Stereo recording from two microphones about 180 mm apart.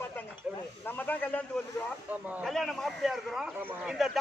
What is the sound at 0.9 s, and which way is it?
A man's voice, 10° left (ahead or behind).